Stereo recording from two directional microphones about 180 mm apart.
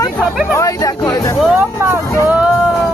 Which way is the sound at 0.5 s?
20° left (ahead or behind).